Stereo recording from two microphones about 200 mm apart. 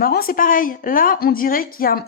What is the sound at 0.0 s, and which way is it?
A woman's voice, 50° left (ahead or behind).